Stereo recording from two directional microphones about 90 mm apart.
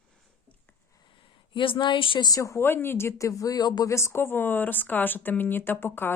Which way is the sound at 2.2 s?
40° left (ahead or behind).